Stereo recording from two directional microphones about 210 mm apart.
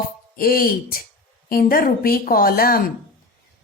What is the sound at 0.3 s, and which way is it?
A woman's voice, 45° left (ahead or behind).